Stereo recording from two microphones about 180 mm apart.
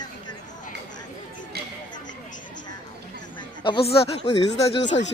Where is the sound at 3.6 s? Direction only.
30° left (ahead or behind).